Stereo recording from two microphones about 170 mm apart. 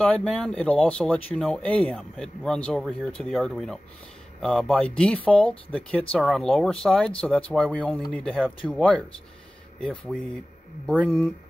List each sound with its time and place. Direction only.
0.0 s speech: centre (ahead or behind)